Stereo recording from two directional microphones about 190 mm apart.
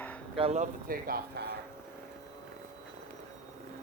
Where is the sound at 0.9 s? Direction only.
50° right (ahead or behind).